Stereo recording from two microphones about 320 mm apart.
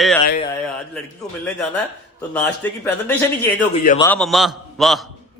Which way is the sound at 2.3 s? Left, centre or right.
Centre.